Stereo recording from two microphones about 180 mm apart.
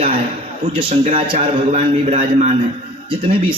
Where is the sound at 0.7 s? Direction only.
30° right (ahead or behind).